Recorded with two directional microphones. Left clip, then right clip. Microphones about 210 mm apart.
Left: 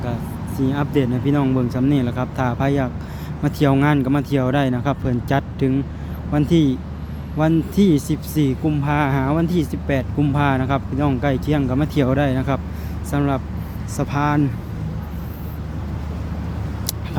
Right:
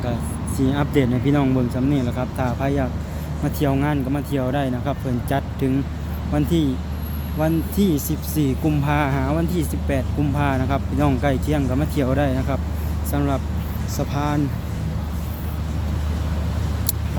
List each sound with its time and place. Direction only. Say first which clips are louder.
0.0 s speech: right 1 dB; 5° left (ahead or behind)